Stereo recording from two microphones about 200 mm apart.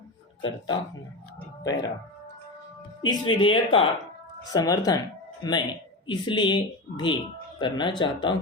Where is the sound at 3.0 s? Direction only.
20° left (ahead or behind).